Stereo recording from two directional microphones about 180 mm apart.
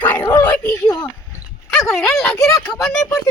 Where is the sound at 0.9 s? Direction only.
15° left (ahead or behind).